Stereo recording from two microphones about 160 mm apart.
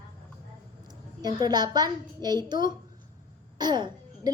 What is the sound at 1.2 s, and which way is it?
A woman's voice, 25° right (ahead or behind).